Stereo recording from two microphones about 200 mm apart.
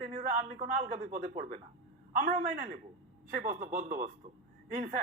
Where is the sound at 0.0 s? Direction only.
35° right (ahead or behind).